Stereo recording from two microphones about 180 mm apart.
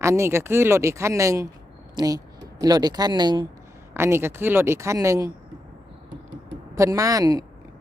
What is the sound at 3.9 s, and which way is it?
Speech, 15° right (ahead or behind).